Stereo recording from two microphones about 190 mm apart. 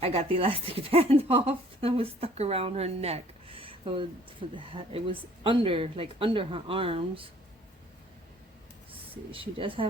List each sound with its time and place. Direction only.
0.0 s speech: 30° right (ahead or behind)
8.9 s speech: 25° right (ahead or behind)